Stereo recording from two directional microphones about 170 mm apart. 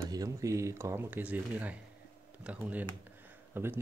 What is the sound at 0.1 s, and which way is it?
Speech, 20° right (ahead or behind).